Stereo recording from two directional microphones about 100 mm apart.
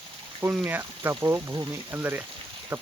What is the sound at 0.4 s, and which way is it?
Speech, 20° right (ahead or behind).